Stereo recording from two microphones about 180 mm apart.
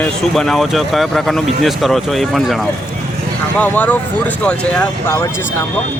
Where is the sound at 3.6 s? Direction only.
10° left (ahead or behind).